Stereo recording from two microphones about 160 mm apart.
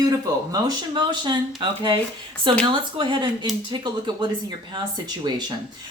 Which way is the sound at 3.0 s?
30° right (ahead or behind).